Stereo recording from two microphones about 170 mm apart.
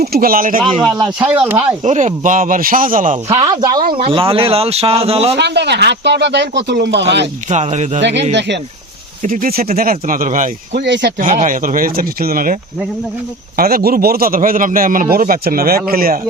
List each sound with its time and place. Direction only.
0.0 s a man's voice: 60° right (ahead or behind)
0.6 s a man's voice: centre (ahead or behind)
1.8 s speech: 45° right (ahead or behind)
3.2 s speech: 20° right (ahead or behind)
5.4 s speech: 90° right
7.5 s speech: 45° right (ahead or behind)
9.2 s speech: 50° right (ahead or behind)
10.8 s speech: 90° right
11.2 s a man's voice: 50° right (ahead or behind)
13.6 s a man's voice: 60° right (ahead or behind)